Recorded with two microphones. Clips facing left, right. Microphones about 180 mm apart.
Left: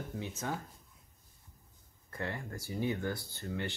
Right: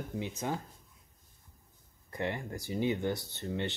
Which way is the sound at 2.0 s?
20° right (ahead or behind).